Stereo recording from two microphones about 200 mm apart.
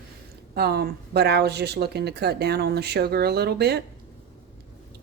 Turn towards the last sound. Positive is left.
turn(degrees=-55)  # may be behind; listen again after turning